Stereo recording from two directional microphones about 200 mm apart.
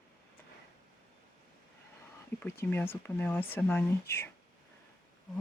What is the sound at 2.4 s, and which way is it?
Speech, 10° left (ahead or behind).